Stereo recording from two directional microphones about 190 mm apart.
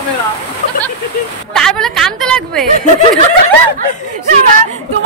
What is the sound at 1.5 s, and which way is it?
A woman's voice, 5° left (ahead or behind).